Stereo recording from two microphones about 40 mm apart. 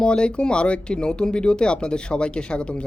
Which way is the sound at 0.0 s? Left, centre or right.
Left.